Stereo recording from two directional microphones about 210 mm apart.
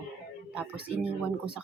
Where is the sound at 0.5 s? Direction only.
5° right (ahead or behind).